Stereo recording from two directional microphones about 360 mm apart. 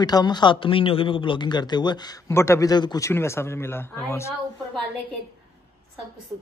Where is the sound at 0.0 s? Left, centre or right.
Centre.